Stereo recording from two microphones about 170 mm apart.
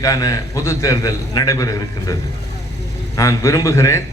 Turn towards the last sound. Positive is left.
turn(degrees=15)  # may be behind; listen again after turning